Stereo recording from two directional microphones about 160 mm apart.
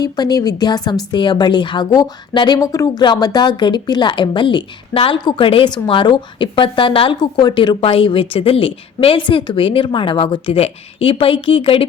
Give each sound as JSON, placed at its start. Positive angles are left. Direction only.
{"t": 0.0, "sound": "a woman's voice", "side_deg": 25}